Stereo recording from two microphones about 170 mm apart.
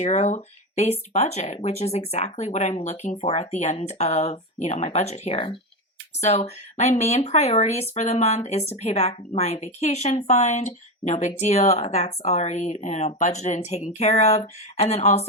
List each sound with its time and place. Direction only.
0.0 s a woman's voice: 40° left (ahead or behind)